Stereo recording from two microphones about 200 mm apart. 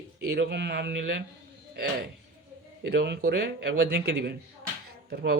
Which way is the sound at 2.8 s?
55° right (ahead or behind).